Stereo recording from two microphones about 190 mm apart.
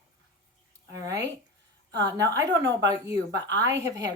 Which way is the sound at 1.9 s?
65° right (ahead or behind).